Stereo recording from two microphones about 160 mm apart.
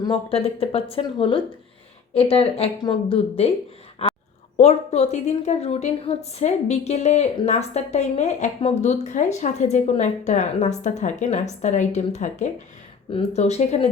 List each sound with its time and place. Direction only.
0.0 s speech: 35° left (ahead or behind)
4.0 s a sound: 40° left (ahead or behind)
4.5 s a woman's voice: 40° left (ahead or behind)